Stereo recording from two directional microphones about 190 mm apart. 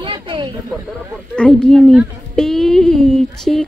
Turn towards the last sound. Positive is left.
turn(degrees=5)  # may be behind; listen again after turning